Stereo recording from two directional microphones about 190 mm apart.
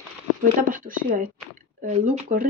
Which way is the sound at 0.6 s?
45° right (ahead or behind).